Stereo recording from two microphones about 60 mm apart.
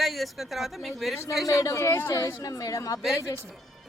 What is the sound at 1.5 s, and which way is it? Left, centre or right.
A woman's voice, left.